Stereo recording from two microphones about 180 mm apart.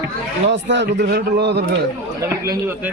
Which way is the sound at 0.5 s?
80° right.